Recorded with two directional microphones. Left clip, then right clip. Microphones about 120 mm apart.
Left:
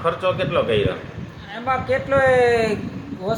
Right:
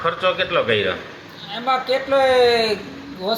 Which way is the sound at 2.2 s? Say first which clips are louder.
Right 1 dB; 60° left (ahead or behind).